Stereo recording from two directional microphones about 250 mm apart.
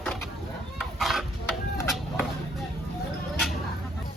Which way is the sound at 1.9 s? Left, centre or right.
Centre.